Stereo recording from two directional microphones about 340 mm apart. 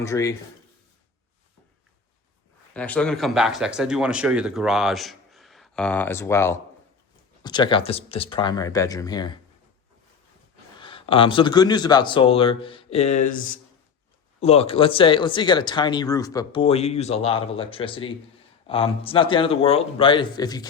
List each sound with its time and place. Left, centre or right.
0.0 s speech: centre
2.7 s speech: centre
10.8 s speech: centre